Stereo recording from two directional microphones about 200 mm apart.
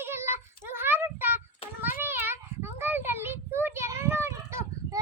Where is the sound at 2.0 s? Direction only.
10° right (ahead or behind).